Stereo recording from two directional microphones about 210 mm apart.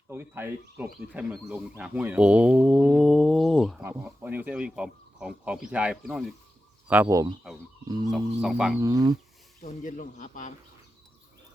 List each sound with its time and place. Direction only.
0.1 s speech: 10° right (ahead or behind)
8.1 s speech: centre (ahead or behind)
8.8 s speech: 15° right (ahead or behind)
9.6 s speech: 40° left (ahead or behind)